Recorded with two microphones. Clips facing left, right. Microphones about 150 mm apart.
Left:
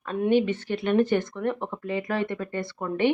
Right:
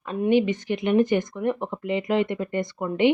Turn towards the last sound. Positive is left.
turn(degrees=-15)  # may be behind; listen again after turning